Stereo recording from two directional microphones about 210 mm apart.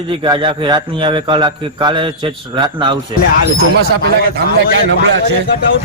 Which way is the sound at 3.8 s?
50° right (ahead or behind).